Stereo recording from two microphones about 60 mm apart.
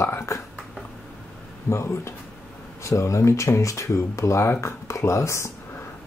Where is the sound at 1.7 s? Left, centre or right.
Left.